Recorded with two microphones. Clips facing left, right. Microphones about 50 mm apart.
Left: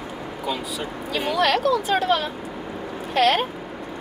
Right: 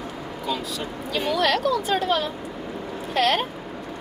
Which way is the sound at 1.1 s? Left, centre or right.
Centre.